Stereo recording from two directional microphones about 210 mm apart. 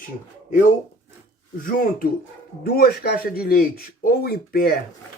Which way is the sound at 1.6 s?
40° left (ahead or behind).